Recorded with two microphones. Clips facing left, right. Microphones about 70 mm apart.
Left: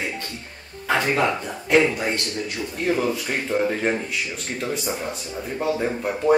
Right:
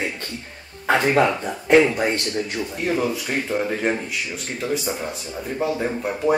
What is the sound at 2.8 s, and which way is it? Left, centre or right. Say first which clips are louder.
Speech: left 1 dB; centre.